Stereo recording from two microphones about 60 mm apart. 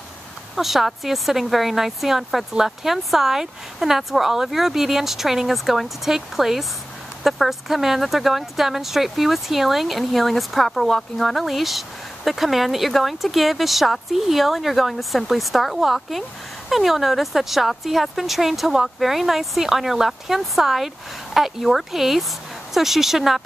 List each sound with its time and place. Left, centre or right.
0.6 s speech: centre